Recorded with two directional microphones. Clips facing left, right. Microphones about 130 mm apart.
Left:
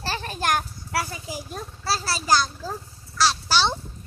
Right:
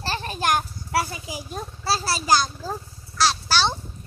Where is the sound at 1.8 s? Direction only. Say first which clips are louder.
Right 2 dB; 20° right (ahead or behind).